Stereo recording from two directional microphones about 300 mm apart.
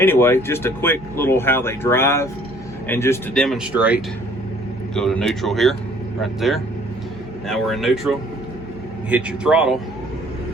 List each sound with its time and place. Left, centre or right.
0.0 s speech: centre
7.4 s speech: centre